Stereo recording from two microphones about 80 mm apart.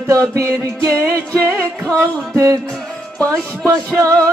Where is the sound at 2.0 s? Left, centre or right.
Right.